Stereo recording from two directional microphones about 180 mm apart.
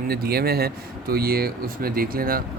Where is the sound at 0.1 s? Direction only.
60° right (ahead or behind).